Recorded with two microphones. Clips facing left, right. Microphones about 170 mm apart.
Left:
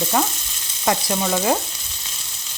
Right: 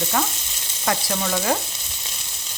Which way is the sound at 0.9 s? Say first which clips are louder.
Left 3 dB; 20° left (ahead or behind).